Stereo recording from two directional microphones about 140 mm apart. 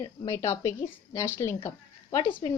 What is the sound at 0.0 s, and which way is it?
A woman's voice, 20° left (ahead or behind).